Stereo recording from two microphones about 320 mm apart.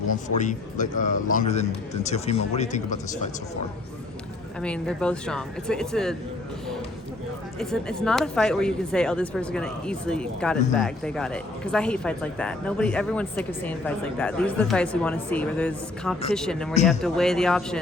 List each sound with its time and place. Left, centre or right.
0.3 s a man's voice: left
4.6 s speech: centre
7.6 s speech: centre